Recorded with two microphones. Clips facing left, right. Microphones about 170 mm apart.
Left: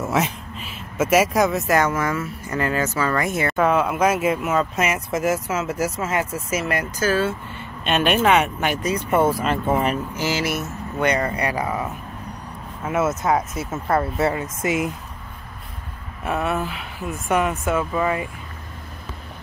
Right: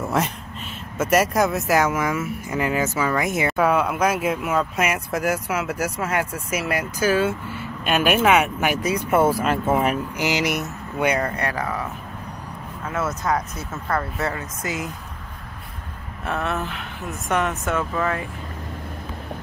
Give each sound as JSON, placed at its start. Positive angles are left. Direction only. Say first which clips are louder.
{"t": 0.0, "sound": "a sound", "louder": "left 1 dB", "side_deg": 0}
{"t": 0.9, "sound": "speech", "louder": "left 1 dB", "side_deg": 5}
{"t": 10.1, "sound": "speech", "louder": "right 1 dB", "side_deg": -15}
{"t": 11.1, "sound": "speech", "louder": "left 1 dB", "side_deg": 5}
{"t": 16.3, "sound": "speech", "louder": "left 2 dB", "side_deg": 10}